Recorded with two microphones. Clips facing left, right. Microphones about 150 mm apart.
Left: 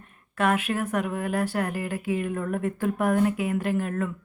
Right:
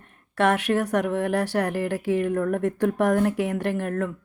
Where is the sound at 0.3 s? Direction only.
75° right (ahead or behind).